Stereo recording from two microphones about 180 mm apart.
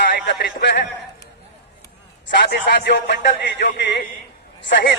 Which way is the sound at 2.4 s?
70° left (ahead or behind).